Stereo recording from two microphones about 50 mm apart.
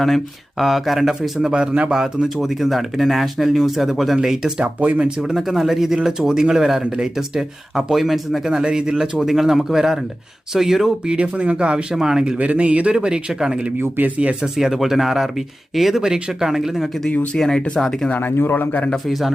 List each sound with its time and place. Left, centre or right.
0.6 s speech: centre
2.4 s speech: centre
4.6 s a man's voice: right
5.2 s speech: centre
11.0 s speech: right
12.4 s a man's voice: right
13.8 s speech: right
14.4 s speech: centre
17.3 s speech: centre
18.1 s speech: left
18.5 s a man's voice: left
19.0 s speech: centre